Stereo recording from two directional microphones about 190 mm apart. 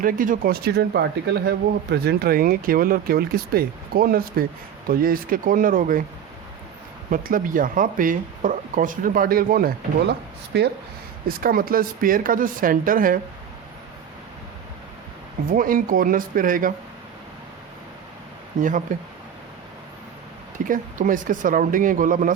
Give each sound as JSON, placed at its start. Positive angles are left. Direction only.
{"t": 0.0, "sound": "speech", "side_deg": -45}
{"t": 7.1, "sound": "speech", "side_deg": -45}
{"t": 11.3, "sound": "speech", "side_deg": -50}
{"t": 15.5, "sound": "speech", "side_deg": -45}
{"t": 18.9, "sound": "speech", "side_deg": -45}
{"t": 20.7, "sound": "speech", "side_deg": -45}